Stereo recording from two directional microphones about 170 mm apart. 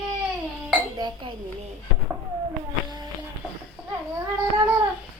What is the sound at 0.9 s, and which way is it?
Chink, 25° right (ahead or behind).